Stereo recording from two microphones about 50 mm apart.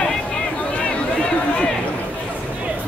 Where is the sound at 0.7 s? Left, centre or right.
Left.